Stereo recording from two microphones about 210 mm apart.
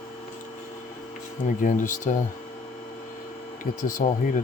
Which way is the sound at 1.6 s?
40° left (ahead or behind).